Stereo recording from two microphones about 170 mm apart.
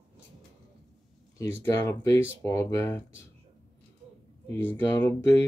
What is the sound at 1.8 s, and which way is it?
Speech, 15° left (ahead or behind).